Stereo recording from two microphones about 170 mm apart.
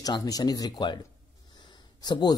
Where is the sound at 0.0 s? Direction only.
20° left (ahead or behind).